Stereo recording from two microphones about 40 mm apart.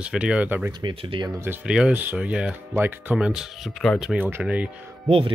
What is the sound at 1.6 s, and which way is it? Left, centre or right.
Speech, centre.